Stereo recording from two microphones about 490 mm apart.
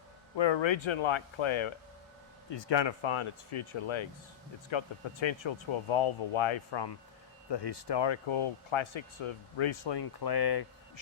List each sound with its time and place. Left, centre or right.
0.3 s speech: left
2.5 s speech: left